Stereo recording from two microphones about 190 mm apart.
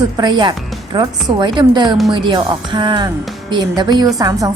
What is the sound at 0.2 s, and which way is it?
A woman's voice, 25° right (ahead or behind).